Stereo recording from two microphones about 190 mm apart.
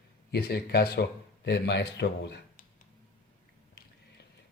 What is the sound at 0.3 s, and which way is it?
Speech, 55° left (ahead or behind).